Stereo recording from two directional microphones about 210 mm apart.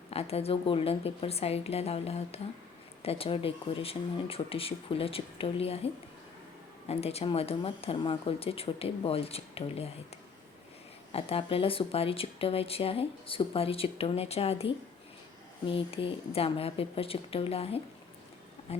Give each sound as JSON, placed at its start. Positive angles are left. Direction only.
{"t": 0.1, "sound": "speech", "side_deg": 30}
{"t": 11.1, "sound": "speech", "side_deg": 25}